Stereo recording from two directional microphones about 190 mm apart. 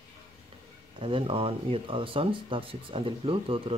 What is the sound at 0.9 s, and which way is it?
Speech, 30° right (ahead or behind).